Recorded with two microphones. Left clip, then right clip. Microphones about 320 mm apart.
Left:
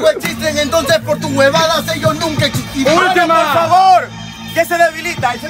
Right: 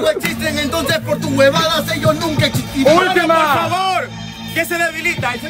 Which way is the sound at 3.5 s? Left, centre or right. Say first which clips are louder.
Left 7 dB; centre.